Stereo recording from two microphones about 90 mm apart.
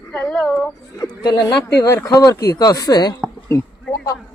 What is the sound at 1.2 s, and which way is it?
Speech, 50° left (ahead or behind).